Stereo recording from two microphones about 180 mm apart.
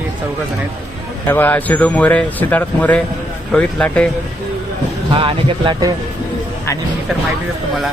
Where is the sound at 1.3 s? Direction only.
10° left (ahead or behind).